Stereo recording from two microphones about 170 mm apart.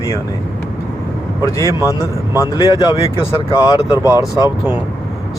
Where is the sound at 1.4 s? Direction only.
20° left (ahead or behind).